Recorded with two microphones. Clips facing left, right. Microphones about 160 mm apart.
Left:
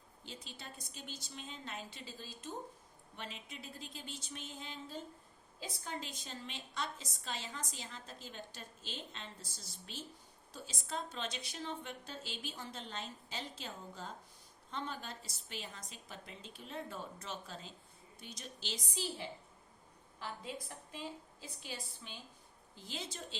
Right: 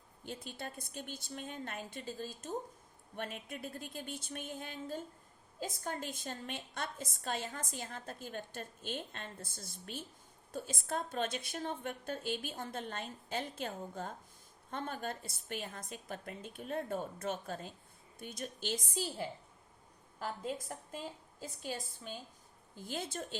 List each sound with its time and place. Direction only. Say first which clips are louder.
0.3 s a woman's voice: right 7 dB; 55° right (ahead or behind)